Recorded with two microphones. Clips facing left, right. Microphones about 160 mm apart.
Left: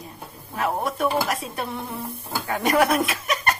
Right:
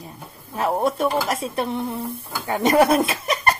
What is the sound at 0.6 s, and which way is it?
Speech, 25° right (ahead or behind).